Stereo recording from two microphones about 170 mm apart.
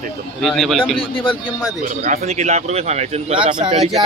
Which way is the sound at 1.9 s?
45° right (ahead or behind).